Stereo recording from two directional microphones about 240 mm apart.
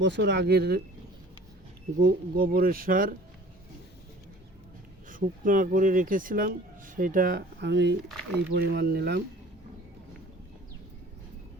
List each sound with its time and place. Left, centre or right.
0.0 s speech: right
2.0 s speech: right
5.0 s speech: right